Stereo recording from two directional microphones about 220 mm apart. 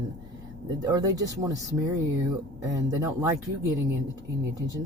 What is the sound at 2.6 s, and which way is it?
Speech, 15° right (ahead or behind).